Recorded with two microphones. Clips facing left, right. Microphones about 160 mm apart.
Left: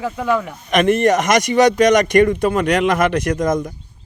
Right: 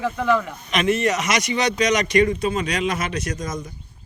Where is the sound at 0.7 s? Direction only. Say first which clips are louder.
Left 6 dB; 55° left (ahead or behind).